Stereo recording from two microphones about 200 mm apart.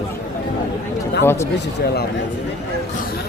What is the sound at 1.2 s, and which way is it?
Speech, 10° left (ahead or behind).